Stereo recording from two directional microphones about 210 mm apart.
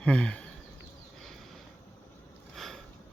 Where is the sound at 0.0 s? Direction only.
5° left (ahead or behind).